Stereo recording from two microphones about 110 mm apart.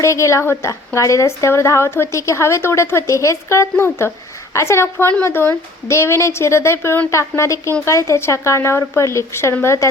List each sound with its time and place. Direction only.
0.0 s a woman's voice: 25° left (ahead or behind)